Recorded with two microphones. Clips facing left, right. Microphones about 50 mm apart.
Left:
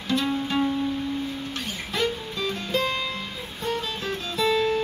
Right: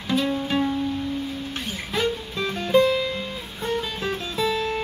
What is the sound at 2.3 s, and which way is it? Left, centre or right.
Music, right.